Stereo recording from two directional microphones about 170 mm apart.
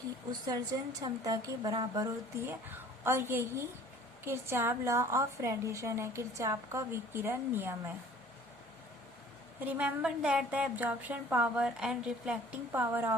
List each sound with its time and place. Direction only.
0.3 s a woman's voice: 20° right (ahead or behind)
9.6 s a woman's voice: 5° right (ahead or behind)